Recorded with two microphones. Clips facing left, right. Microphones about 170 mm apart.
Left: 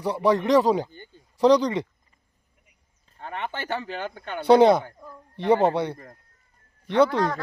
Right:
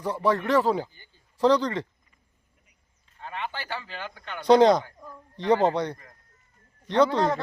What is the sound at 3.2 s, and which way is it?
Speech, 50° left (ahead or behind).